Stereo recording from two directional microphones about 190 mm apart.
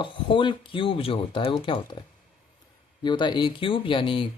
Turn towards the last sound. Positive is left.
turn(degrees=25)  # may be behind; listen again after turning